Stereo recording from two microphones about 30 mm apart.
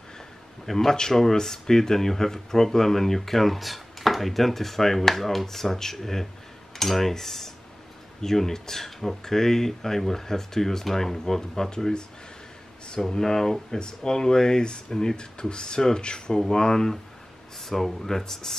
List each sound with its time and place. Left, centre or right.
0.7 s speech: centre
11.7 s speech: left
13.1 s speech: centre
13.7 s speech: left
16.3 s speech: centre
17.6 s speech: centre